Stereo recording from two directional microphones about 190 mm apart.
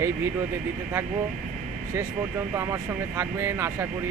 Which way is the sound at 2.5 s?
15° right (ahead or behind).